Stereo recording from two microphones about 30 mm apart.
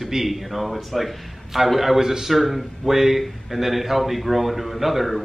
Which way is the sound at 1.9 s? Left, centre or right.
Centre.